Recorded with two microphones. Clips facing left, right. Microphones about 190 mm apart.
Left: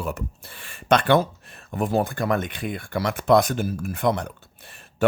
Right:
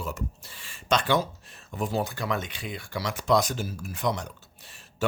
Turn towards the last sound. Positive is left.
turn(degrees=55)  # may be behind; listen again after turning